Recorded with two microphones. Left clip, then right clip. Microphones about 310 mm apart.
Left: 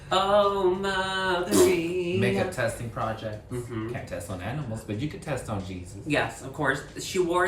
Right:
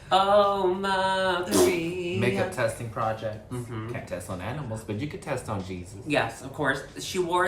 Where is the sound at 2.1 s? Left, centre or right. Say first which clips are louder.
Right 1 dB; centre.